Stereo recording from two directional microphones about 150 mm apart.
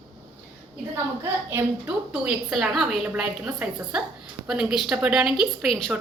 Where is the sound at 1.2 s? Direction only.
15° right (ahead or behind).